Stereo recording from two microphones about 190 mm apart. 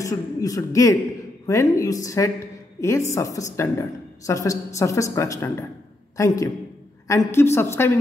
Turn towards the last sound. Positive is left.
turn(degrees=15)  # may be behind; listen again after turning